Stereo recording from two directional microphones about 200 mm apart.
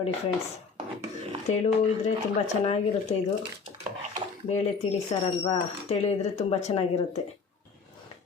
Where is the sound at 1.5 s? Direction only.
35° left (ahead or behind).